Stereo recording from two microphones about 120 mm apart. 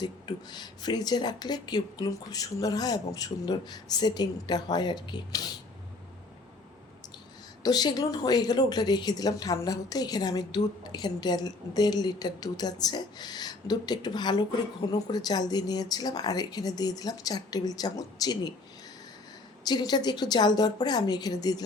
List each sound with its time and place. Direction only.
0.0 s a woman's voice: 35° left (ahead or behind)
7.6 s a woman's voice: 35° left (ahead or behind)
19.6 s a woman's voice: 35° left (ahead or behind)